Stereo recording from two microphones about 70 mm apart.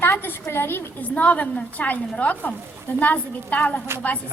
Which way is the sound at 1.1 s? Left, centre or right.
Left.